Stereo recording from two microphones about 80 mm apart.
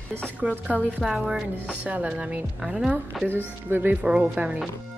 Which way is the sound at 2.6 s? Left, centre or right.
Centre.